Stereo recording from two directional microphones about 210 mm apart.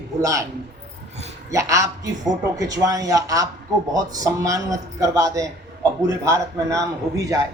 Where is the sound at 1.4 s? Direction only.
15° right (ahead or behind).